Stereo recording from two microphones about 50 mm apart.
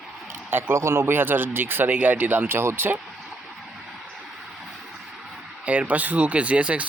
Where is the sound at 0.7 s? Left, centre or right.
Right.